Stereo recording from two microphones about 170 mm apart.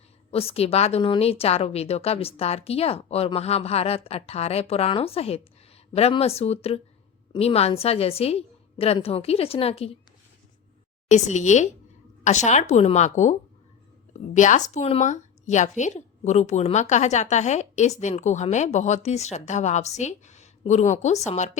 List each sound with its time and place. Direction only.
0.3 s a woman's voice: 35° left (ahead or behind)
11.1 s a woman's voice: 45° left (ahead or behind)